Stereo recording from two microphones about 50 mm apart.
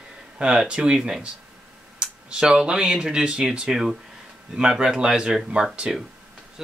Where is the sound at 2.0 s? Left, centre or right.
Centre.